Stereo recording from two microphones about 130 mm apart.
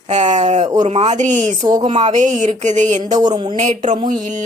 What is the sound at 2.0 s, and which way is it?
Speech, 65° right (ahead or behind).